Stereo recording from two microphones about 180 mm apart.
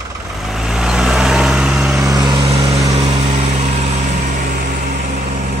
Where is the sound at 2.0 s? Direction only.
20° right (ahead or behind); by 3.9 s 35° right (ahead or behind).